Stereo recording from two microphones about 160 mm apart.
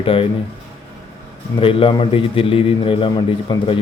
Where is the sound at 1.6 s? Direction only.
35° left (ahead or behind).